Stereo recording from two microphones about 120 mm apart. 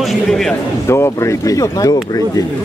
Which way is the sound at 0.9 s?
25° left (ahead or behind).